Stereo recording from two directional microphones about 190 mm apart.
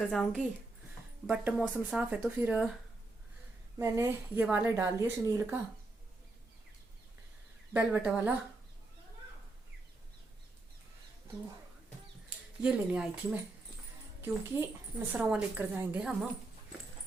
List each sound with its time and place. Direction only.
0.0 s speech: 5° left (ahead or behind)
1.3 s a woman's voice: 5° right (ahead or behind)
3.8 s a woman's voice: 15° right (ahead or behind)
7.7 s a woman's voice: 10° right (ahead or behind)
12.6 s a woman's voice: 5° right (ahead or behind)